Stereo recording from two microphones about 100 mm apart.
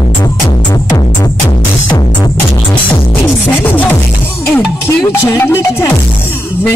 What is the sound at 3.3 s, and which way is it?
Music, 20° left (ahead or behind).